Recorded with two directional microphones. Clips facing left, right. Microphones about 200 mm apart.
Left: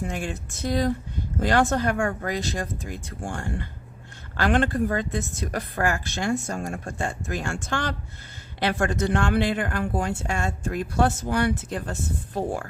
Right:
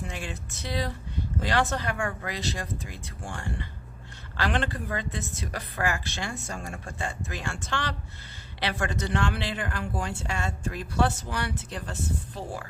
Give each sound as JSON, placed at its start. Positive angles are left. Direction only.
{"t": 0.0, "sound": "speech", "side_deg": 45}